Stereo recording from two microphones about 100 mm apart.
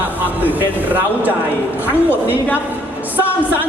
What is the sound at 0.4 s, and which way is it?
Speech, 20° right (ahead or behind).